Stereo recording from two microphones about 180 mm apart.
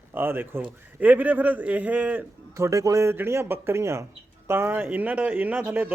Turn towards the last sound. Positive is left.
turn(degrees=-10)  # may be behind; listen again after turning